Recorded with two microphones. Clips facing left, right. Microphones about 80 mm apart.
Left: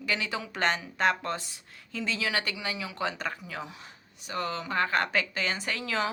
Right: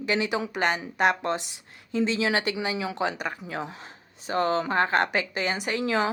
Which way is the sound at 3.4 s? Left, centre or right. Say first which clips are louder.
Right 5 dB; right.